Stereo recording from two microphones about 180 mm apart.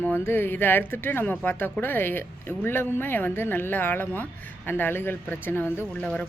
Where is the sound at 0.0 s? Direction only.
10° left (ahead or behind).